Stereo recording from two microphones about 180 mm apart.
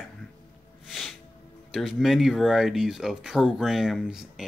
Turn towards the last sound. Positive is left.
turn(degrees=0)  # may be behind; listen again after turning